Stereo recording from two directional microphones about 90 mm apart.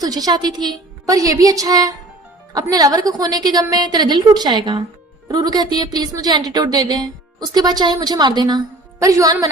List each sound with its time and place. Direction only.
0.0 s speech: 45° right (ahead or behind)
9.0 s a woman's voice: 35° right (ahead or behind)